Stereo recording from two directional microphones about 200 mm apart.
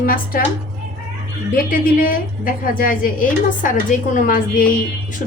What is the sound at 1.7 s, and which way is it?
Speech, 45° left (ahead or behind).